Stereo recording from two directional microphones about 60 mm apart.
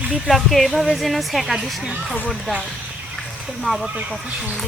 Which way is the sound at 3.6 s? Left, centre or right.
Centre.